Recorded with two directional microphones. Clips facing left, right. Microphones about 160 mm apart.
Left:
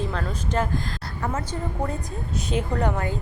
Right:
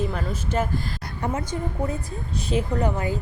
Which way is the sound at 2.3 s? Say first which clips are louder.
Right 1 dB; centre (ahead or behind).